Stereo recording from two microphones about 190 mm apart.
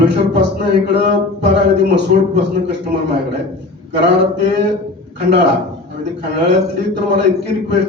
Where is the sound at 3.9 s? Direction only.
65° right (ahead or behind).